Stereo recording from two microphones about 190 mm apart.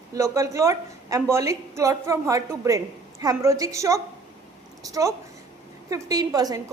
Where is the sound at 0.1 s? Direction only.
15° right (ahead or behind).